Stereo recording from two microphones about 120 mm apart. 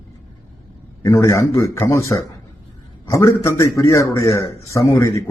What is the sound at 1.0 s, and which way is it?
A man's voice, 25° left (ahead or behind).